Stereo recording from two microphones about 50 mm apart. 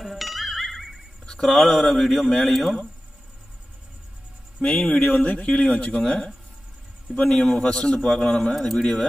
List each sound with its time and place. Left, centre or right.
0.0 s music: centre
1.2 s speech: centre
4.6 s a man's voice: left